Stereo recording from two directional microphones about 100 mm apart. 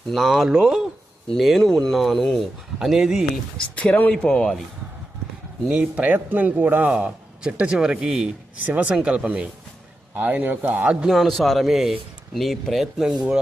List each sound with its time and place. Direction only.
0.1 s speech: centre (ahead or behind)
3.6 s speech: 10° left (ahead or behind)
5.6 s a man's voice: 10° right (ahead or behind)
11.0 s speech: centre (ahead or behind)